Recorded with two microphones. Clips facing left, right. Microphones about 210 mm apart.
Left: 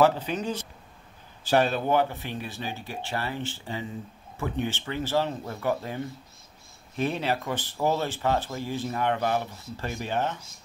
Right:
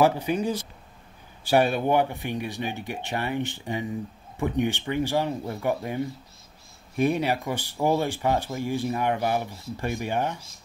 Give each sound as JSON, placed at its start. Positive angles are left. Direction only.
{"t": 0.0, "sound": "speech", "side_deg": -10}